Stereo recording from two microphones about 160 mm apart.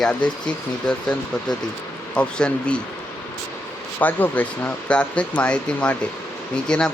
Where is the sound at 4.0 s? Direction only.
10° left (ahead or behind).